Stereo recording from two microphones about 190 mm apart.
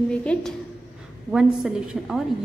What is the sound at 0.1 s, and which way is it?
A woman's voice, 5° left (ahead or behind).